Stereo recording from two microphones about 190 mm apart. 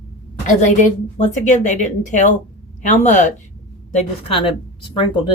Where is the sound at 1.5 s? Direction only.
40° left (ahead or behind).